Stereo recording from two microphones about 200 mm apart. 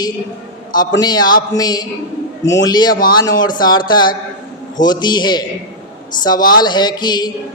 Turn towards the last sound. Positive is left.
turn(degrees=20)  # may be behind; listen again after turning